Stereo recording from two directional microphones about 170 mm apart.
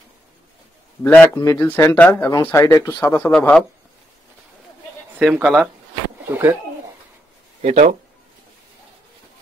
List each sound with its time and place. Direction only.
1.0 s speech: 10° left (ahead or behind)
3.3 s speech: 5° left (ahead or behind)
5.2 s speech: centre (ahead or behind)
6.2 s speech: 10° right (ahead or behind)
7.6 s speech: 40° right (ahead or behind)